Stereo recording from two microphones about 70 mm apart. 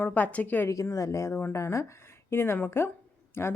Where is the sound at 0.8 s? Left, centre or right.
Left.